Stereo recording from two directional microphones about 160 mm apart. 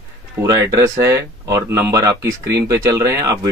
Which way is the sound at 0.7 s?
20° right (ahead or behind).